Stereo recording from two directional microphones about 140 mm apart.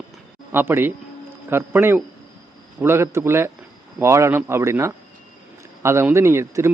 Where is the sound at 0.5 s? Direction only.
15° right (ahead or behind).